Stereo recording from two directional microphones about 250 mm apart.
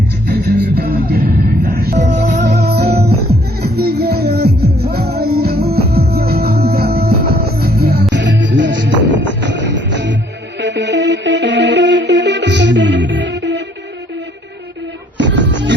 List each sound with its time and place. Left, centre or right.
0.9 s music: right
4.4 s music: right
4.8 s music: right
15.2 s music: right